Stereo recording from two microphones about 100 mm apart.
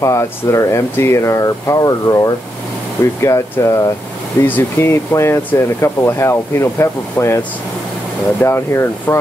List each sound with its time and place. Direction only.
0.0 s speech: 30° left (ahead or behind)